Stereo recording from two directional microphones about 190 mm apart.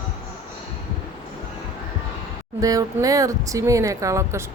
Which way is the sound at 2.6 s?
20° right (ahead or behind).